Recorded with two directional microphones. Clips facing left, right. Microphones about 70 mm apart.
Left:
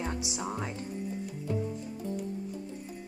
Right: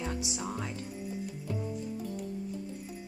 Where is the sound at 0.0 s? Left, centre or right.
Left.